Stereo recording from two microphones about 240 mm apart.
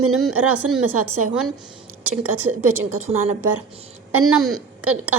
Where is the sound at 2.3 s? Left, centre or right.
Centre.